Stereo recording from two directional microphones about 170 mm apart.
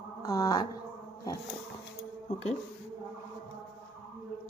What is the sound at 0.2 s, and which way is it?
Speech, 20° left (ahead or behind).